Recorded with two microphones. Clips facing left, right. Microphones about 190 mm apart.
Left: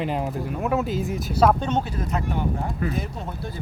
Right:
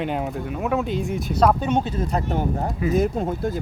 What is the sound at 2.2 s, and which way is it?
Speech, 40° right (ahead or behind).